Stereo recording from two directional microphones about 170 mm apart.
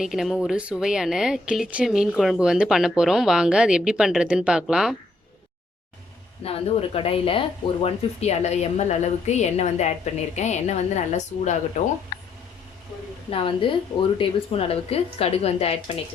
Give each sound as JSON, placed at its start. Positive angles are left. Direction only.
{"t": 0.0, "sound": "speech", "side_deg": 0}
{"t": 6.4, "sound": "a woman's voice", "side_deg": 35}
{"t": 12.1, "sound": "a sound", "side_deg": 70}
{"t": 13.3, "sound": "speech", "side_deg": 30}